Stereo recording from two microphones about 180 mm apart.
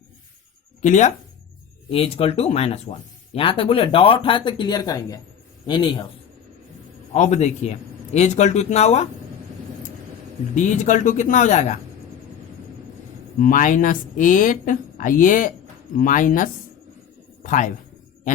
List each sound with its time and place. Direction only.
0.8 s speech: 45° left (ahead or behind)
1.9 s speech: 30° left (ahead or behind)
7.1 s speech: 40° left (ahead or behind)
10.5 s speech: 40° left (ahead or behind)
13.4 s a man's voice: 50° left (ahead or behind)